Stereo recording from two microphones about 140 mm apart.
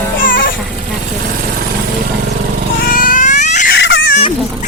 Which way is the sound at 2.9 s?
75° left (ahead or behind).